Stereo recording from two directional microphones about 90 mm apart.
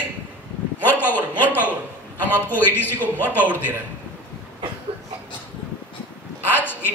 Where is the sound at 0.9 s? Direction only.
20° left (ahead or behind).